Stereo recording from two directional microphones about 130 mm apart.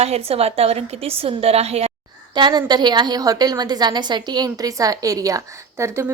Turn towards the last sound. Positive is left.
turn(degrees=-20)  # may be behind; listen again after turning